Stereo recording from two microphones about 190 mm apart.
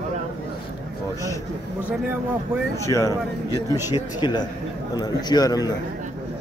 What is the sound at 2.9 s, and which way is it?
A man's voice, 15° left (ahead or behind).